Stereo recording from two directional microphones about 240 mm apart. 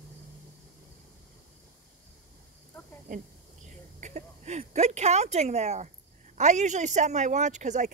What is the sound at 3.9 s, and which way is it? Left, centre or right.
Speech, right.